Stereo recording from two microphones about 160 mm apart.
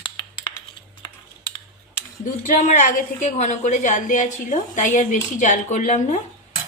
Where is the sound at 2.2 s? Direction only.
50° left (ahead or behind).